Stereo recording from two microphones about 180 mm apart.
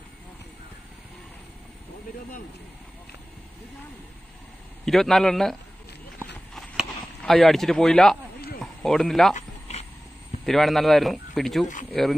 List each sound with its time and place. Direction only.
4.8 s speech: centre (ahead or behind)
6.5 s a sound: centre (ahead or behind)
8.8 s speech: centre (ahead or behind)
9.3 s dog: 35° left (ahead or behind)
10.4 s speech: centre (ahead or behind)